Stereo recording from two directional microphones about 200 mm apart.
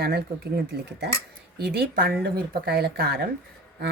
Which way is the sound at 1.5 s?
50° right (ahead or behind).